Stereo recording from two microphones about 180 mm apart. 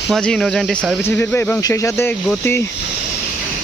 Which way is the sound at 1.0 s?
15° left (ahead or behind).